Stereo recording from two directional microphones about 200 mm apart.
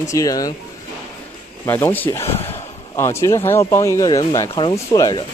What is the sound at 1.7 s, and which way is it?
Speech, 10° left (ahead or behind).